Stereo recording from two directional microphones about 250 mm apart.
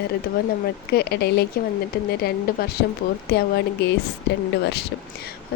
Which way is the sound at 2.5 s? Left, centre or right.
Left.